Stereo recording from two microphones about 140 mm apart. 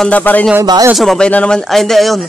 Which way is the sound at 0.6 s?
30° right (ahead or behind).